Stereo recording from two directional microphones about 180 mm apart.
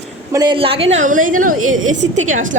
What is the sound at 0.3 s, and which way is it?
Speech, 25° right (ahead or behind).